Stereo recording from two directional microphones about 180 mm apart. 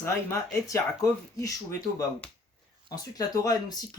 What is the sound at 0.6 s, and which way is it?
Speech, 20° left (ahead or behind).